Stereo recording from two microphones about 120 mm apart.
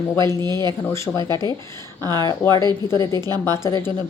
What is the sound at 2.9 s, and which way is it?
Speech, 30° left (ahead or behind).